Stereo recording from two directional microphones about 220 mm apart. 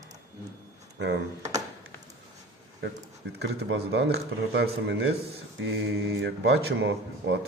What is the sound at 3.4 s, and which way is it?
Speech, 50° right (ahead or behind).